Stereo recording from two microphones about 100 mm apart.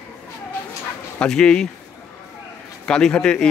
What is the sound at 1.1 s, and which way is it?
Speech, 10° left (ahead or behind).